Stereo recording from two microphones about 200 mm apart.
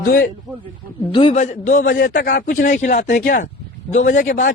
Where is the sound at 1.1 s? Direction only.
25° left (ahead or behind).